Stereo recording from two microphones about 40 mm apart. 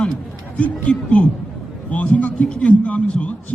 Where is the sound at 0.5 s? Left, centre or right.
Left.